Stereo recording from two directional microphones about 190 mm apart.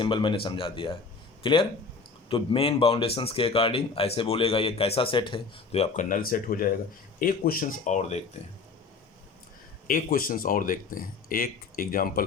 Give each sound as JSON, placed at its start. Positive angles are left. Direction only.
{"t": 0.0, "sound": "speech", "side_deg": 25}
{"t": 9.8, "sound": "speech", "side_deg": 45}